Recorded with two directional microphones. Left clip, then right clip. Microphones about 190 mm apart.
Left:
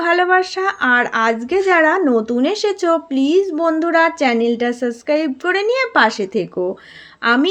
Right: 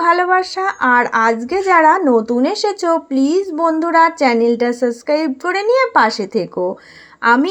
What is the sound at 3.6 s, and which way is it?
Speech, 35° left (ahead or behind).